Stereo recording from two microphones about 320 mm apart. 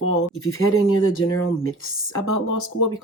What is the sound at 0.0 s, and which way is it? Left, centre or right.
Speech, left.